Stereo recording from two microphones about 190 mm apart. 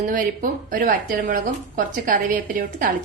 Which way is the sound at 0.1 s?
45° right (ahead or behind).